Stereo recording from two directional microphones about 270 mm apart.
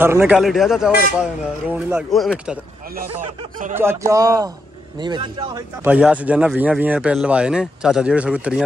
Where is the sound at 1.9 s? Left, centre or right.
Centre.